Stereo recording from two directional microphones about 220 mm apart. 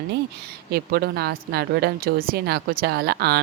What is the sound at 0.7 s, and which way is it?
A woman's voice, 45° right (ahead or behind).